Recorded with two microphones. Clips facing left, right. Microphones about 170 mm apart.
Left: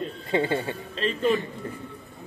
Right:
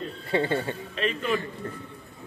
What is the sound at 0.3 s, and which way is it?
Speech, 15° left (ahead or behind).